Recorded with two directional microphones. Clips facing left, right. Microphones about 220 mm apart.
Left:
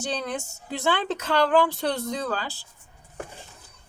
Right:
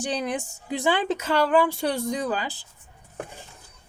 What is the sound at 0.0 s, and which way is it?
Speech, 15° right (ahead or behind).